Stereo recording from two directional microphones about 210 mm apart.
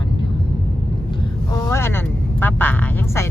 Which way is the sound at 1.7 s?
10° left (ahead or behind).